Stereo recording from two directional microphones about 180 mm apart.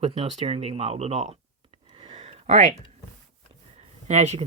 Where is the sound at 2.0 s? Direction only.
30° right (ahead or behind).